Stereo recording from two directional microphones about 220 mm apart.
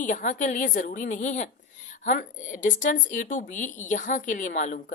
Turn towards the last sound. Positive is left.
turn(degrees=35)  # may be behind; listen again after turning